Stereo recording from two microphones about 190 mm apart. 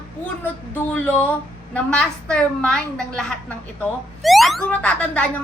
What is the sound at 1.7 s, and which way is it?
Speech, 5° left (ahead or behind).